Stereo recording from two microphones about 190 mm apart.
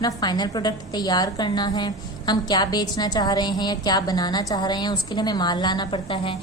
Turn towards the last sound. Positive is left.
turn(degrees=25)  # may be behind; listen again after turning